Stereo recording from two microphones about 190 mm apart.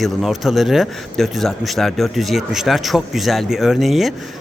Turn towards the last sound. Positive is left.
turn(degrees=0)  # may be behind; listen again after turning